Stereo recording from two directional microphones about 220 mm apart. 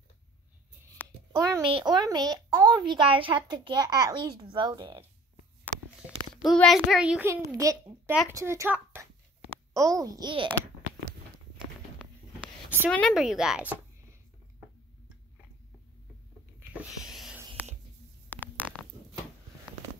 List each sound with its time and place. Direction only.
1.3 s a woman's voice: 20° right (ahead or behind)
6.3 s a child's voice: centre (ahead or behind); by 10.5 s 20° right (ahead or behind)
12.9 s a child's voice: centre (ahead or behind)
16.5 s a sound: 5° right (ahead or behind)